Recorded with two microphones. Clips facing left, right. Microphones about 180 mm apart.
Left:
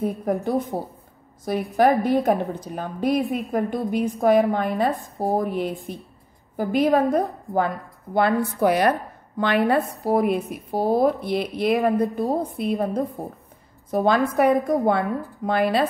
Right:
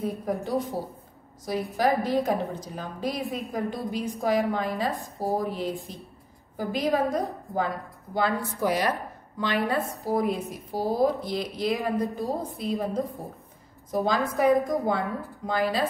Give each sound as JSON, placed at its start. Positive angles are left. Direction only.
{"t": 0.0, "sound": "a woman's voice", "side_deg": 55}